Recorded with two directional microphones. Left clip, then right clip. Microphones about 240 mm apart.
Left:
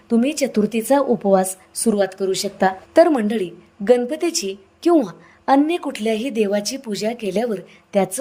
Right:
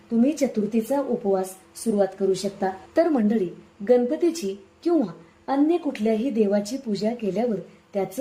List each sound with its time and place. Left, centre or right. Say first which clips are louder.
0.1 s a woman's voice: left 3 dB; left